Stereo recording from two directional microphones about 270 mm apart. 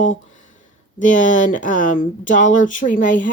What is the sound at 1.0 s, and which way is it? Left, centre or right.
Speech, left.